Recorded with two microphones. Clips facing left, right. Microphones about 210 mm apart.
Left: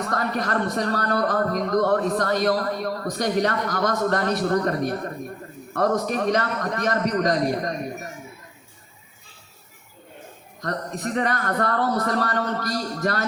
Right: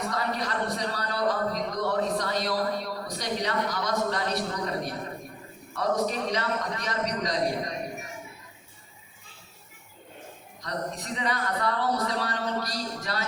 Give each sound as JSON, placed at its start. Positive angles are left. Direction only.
{"t": 0.1, "sound": "a man's voice", "side_deg": 55}
{"t": 10.6, "sound": "a man's voice", "side_deg": 55}